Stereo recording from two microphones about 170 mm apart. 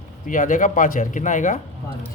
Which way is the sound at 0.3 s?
50° left (ahead or behind).